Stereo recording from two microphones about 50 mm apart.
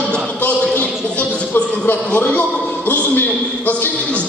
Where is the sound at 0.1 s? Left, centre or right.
Left.